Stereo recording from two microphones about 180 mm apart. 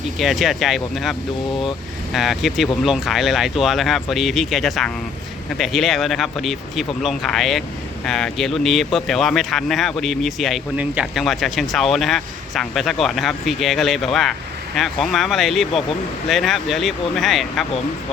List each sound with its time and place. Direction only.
0.2 s speech: centre (ahead or behind)
2.1 s speech: centre (ahead or behind)